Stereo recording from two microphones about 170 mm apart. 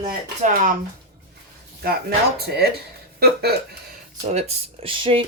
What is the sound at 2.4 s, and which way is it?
Speech, 70° right (ahead or behind).